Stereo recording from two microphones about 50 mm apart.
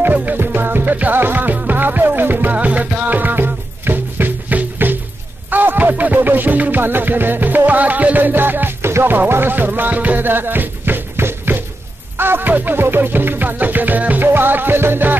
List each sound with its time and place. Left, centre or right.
0.0 s music: right
2.5 s music: right